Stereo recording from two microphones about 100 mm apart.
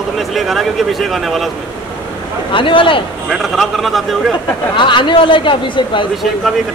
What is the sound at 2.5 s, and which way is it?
Speech, 60° left (ahead or behind).